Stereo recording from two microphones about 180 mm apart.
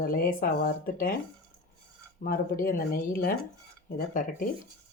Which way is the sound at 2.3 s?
50° left (ahead or behind).